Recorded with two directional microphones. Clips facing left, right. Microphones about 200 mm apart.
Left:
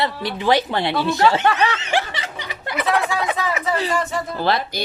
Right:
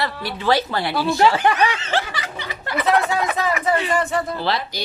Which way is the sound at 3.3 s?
25° left (ahead or behind).